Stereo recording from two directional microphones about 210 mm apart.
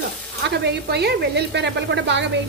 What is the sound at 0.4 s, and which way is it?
A woman's voice, 50° right (ahead or behind).